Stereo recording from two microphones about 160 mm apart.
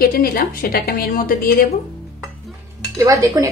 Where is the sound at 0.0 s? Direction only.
70° left (ahead or behind).